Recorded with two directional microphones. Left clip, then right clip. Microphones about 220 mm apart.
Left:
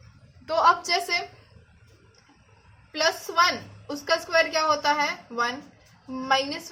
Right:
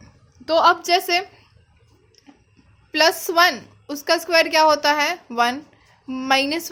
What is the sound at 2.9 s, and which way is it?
A woman's voice, 45° right (ahead or behind).